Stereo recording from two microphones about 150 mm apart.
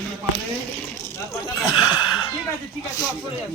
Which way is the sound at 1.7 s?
30° left (ahead or behind).